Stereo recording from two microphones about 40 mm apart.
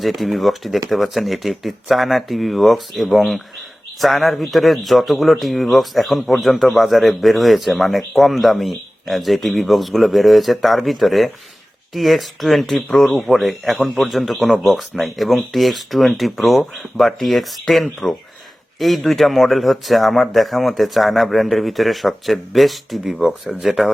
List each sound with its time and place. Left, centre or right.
0.0 s speech: centre
23.2 s speech: centre
23.6 s speech: centre